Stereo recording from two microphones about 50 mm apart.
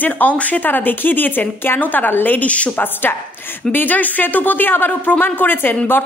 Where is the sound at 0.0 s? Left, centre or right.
Left.